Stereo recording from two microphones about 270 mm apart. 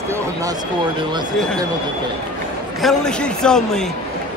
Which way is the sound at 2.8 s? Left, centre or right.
Centre.